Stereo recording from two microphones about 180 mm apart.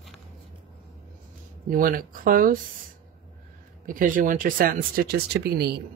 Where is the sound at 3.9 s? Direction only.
50° right (ahead or behind).